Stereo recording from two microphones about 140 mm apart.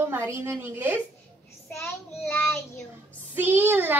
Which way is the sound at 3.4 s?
15° right (ahead or behind).